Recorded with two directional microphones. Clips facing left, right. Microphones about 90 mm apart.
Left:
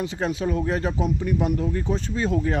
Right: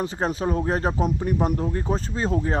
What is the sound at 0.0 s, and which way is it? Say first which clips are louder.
Speech: right 1 dB; 40° right (ahead or behind).